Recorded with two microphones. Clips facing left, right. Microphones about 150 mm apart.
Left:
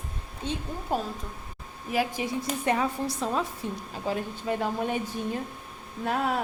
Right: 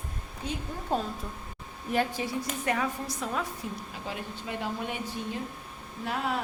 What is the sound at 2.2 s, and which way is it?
A woman's voice, 25° left (ahead or behind).